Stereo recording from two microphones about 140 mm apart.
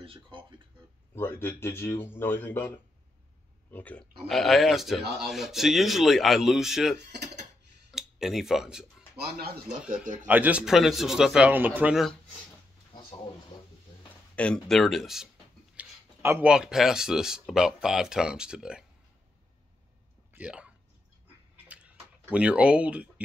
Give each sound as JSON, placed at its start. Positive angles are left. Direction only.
{"t": 0.0, "sound": "speech", "side_deg": -40}
{"t": 1.1, "sound": "a man's voice", "side_deg": 15}
{"t": 4.3, "sound": "speech", "side_deg": 0}
{"t": 9.4, "sound": "speech", "side_deg": -90}
{"t": 10.2, "sound": "speech", "side_deg": -10}
{"t": 14.3, "sound": "speech", "side_deg": 10}
{"t": 15.7, "sound": "a sound", "side_deg": -15}
{"t": 16.4, "sound": "speech", "side_deg": -5}
{"t": 20.3, "sound": "speech", "side_deg": -10}
{"t": 22.3, "sound": "speech", "side_deg": -10}